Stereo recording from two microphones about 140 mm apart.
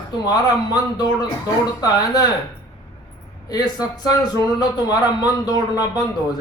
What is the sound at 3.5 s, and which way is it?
A man's voice, 30° left (ahead or behind).